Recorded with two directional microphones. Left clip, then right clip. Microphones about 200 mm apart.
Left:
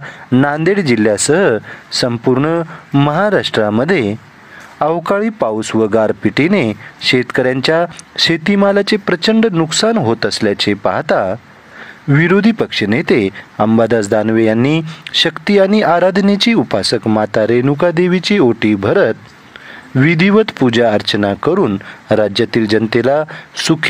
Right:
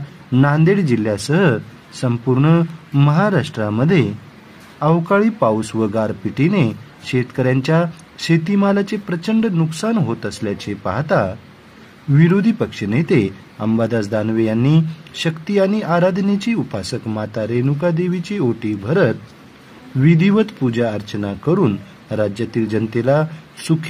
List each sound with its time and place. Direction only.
0.3 s speech: 40° left (ahead or behind)
3.1 s speech: 50° left (ahead or behind)